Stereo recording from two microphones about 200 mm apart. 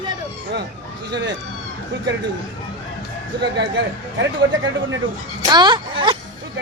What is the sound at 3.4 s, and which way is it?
Speech, 60° right (ahead or behind).